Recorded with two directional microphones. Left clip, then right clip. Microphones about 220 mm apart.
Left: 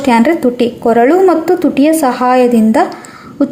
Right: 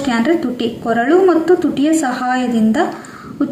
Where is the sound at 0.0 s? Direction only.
35° left (ahead or behind).